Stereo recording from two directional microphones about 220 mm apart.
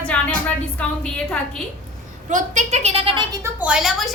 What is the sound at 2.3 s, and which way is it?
Speech, 30° right (ahead or behind).